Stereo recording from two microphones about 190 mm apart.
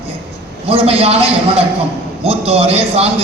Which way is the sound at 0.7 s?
30° right (ahead or behind).